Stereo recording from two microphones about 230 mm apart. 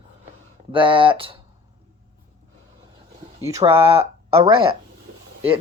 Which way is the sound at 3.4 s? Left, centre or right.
Centre.